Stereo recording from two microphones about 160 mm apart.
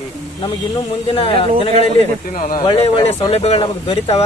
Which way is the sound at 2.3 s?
60° left (ahead or behind).